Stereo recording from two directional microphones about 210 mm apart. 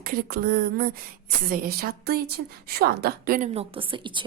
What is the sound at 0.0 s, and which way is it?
A woman's voice, 45° right (ahead or behind).